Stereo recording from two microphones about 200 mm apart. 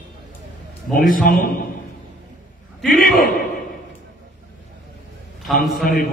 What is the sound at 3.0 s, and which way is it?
Speech, 45° left (ahead or behind).